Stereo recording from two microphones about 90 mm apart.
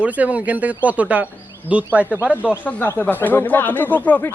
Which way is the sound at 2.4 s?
20° left (ahead or behind).